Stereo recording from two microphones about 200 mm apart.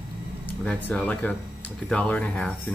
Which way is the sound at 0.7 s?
5° left (ahead or behind).